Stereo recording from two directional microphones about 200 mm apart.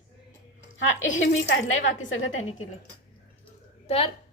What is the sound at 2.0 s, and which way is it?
Speech, 75° left (ahead or behind).